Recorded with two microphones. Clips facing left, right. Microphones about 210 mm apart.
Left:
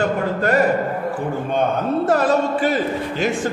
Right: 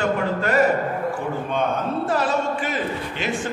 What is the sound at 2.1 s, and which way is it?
Mantra, 45° left (ahead or behind).